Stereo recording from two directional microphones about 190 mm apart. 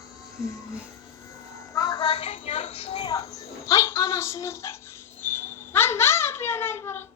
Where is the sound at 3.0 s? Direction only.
20° left (ahead or behind).